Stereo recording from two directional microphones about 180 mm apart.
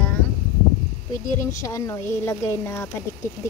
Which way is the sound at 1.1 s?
20° left (ahead or behind).